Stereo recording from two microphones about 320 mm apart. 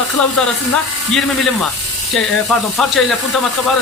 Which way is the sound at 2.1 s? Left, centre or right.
Centre.